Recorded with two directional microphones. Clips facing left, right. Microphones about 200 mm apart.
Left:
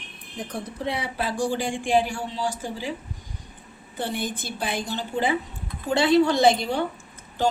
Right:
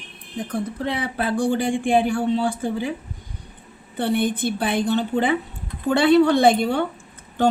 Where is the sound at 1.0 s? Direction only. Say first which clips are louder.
Right 5 dB; 55° right (ahead or behind).